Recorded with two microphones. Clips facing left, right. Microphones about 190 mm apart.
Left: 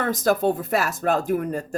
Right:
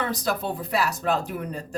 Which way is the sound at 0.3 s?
45° left (ahead or behind).